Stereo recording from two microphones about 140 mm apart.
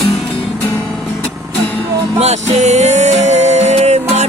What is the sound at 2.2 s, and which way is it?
Music, 50° right (ahead or behind).